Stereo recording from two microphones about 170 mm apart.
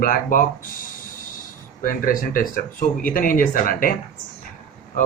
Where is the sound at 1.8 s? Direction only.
55° left (ahead or behind).